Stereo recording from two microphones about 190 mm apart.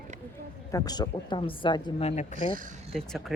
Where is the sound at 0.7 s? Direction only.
20° left (ahead or behind); by 2.3 s 35° left (ahead or behind).